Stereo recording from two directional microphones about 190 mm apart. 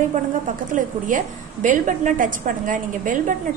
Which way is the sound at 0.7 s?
45° right (ahead or behind).